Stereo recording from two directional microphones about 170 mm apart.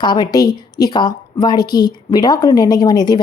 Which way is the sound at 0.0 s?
25° left (ahead or behind).